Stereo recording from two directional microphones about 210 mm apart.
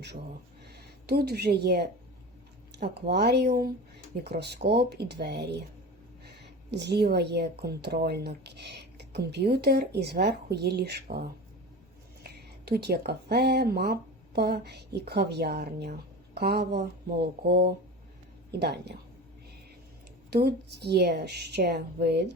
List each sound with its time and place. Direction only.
0.7 s speech: 50° right (ahead or behind)
12.2 s speech: 50° right (ahead or behind)
20.3 s speech: 50° right (ahead or behind)